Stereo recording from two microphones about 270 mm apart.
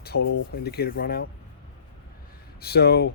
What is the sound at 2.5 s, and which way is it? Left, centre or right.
Speech, left.